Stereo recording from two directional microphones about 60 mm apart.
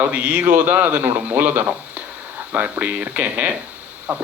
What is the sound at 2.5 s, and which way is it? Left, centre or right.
Speech, right.